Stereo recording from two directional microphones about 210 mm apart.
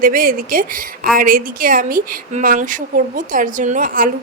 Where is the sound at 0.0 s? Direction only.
40° right (ahead or behind).